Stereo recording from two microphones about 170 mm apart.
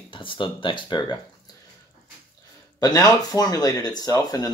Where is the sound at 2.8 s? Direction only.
25° left (ahead or behind).